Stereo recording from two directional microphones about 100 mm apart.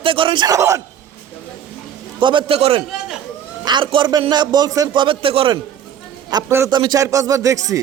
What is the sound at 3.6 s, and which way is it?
Speech, 55° right (ahead or behind).